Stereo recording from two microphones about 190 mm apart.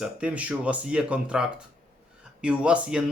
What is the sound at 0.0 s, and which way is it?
A man's voice, 5° right (ahead or behind).